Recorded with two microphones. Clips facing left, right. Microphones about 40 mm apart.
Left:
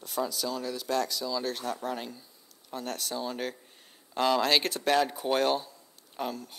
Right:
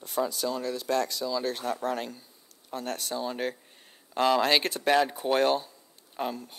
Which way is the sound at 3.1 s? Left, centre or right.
Centre.